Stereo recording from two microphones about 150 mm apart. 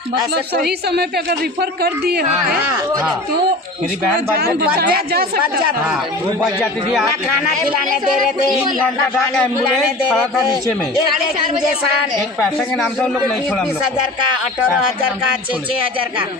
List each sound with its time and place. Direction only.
0.9 s speech: 90° right
4.4 s speech: 90° right
12.7 s a man's voice: centre (ahead or behind)